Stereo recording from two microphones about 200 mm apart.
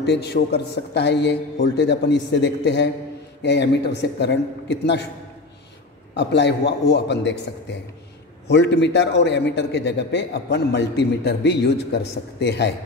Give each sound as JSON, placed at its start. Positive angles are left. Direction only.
{"t": 0.0, "sound": "a man's voice", "side_deg": 55}
{"t": 6.1, "sound": "a man's voice", "side_deg": 60}
{"t": 8.5, "sound": "a man's voice", "side_deg": 60}